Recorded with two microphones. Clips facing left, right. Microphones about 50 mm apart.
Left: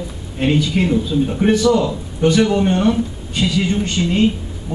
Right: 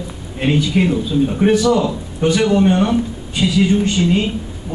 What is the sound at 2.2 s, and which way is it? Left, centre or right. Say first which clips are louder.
A man's voice: even; centre.